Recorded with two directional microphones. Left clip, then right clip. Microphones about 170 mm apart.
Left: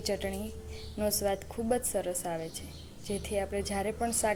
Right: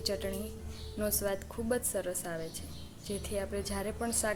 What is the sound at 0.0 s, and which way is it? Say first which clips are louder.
A woman's voice: left 2 dB; 5° left (ahead or behind).